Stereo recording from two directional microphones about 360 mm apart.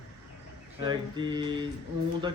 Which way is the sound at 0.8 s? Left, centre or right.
Centre.